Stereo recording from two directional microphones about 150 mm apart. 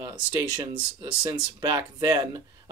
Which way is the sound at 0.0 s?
25° right (ahead or behind).